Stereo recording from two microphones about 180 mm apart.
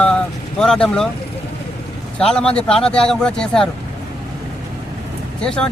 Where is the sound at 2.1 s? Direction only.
5° left (ahead or behind).